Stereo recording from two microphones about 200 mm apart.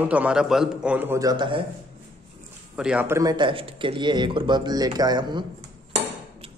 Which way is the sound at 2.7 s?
5° right (ahead or behind).